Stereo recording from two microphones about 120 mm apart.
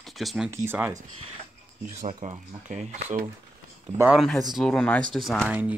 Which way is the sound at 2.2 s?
90° right.